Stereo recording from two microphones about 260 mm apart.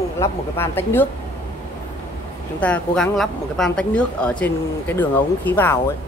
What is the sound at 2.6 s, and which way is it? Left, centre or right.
Speech, centre.